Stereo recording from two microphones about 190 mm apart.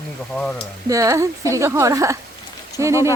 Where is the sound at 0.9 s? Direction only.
15° right (ahead or behind).